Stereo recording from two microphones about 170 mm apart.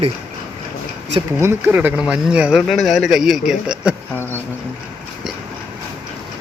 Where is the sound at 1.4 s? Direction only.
10° right (ahead or behind).